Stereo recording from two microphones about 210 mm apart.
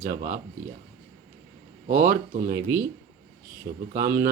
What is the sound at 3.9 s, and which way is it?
Speech, 45° right (ahead or behind).